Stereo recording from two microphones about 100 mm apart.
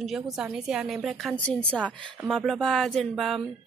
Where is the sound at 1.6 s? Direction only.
20° right (ahead or behind).